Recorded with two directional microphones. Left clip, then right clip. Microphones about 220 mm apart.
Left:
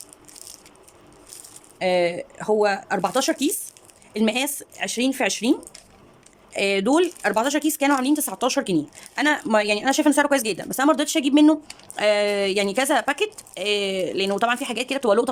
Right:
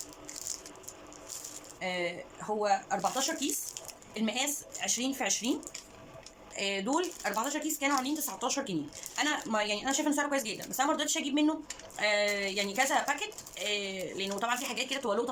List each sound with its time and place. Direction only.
1.8 s speech: 45° left (ahead or behind)